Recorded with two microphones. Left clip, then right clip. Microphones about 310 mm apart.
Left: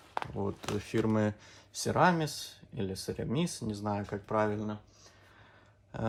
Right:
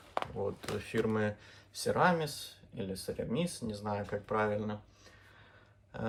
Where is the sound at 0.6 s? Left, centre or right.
Centre.